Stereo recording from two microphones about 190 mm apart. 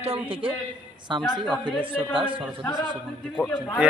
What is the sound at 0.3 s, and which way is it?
Speech, 30° right (ahead or behind).